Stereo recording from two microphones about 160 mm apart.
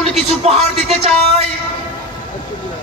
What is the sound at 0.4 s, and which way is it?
Speech, 40° right (ahead or behind).